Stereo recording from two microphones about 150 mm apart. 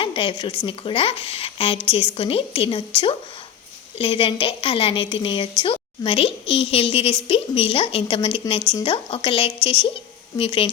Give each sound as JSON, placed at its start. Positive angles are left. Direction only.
{"t": 0.0, "sound": "a woman's voice", "side_deg": 35}